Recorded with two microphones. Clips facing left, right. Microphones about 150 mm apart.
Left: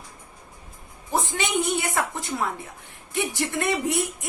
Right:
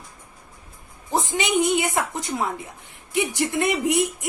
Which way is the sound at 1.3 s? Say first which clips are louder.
Right 7 dB; 15° right (ahead or behind).